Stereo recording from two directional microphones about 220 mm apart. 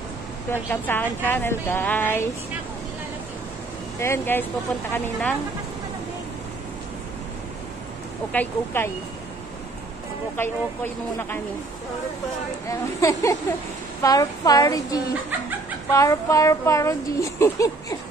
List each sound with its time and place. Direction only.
0.5 s speech: 10° left (ahead or behind)
4.0 s speech: 10° left (ahead or behind)
8.3 s speech: 10° left (ahead or behind)
10.3 s speech: 10° left (ahead or behind)
12.6 s speech: 15° left (ahead or behind)